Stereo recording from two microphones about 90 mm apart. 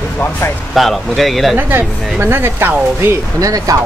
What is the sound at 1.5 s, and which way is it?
Speech, 25° right (ahead or behind).